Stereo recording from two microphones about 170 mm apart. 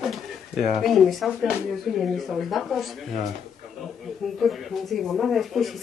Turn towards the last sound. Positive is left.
turn(degrees=0)  # may be behind; listen again after turning